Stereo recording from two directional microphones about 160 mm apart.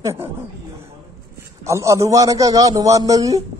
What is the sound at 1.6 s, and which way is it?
A man's voice, 20° right (ahead or behind).